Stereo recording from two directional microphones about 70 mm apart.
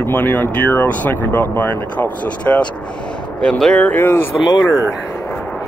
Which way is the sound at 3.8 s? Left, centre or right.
Left.